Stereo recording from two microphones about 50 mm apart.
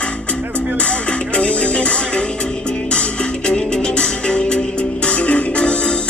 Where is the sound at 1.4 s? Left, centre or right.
Left.